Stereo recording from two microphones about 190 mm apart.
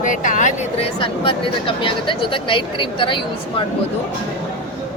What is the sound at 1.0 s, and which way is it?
A woman's voice, 25° left (ahead or behind).